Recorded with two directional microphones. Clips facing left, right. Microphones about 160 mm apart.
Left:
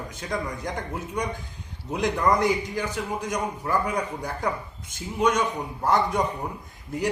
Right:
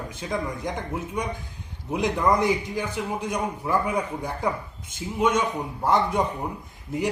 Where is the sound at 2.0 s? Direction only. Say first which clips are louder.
Even; 15° right (ahead or behind).